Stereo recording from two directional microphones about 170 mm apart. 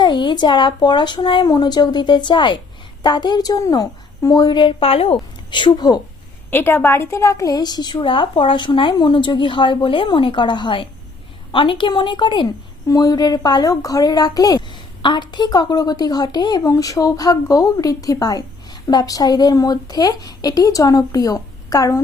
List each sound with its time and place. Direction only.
0.0 s a woman's voice: 25° left (ahead or behind)
6.5 s a woman's voice: 10° left (ahead or behind)